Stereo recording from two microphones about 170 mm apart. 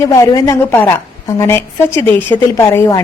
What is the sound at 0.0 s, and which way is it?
A woman's voice, 20° left (ahead or behind).